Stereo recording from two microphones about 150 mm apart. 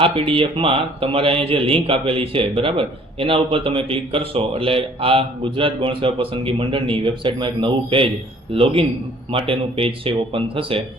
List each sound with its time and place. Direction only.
0.0 s speech: 35° right (ahead or behind)